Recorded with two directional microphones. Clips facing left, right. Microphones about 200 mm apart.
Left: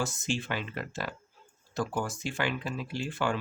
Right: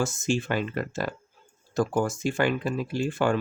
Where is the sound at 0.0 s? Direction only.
45° right (ahead or behind).